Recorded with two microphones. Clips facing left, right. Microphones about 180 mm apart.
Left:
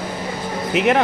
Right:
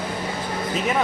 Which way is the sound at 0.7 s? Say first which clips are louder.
Left 8 dB; 70° left (ahead or behind).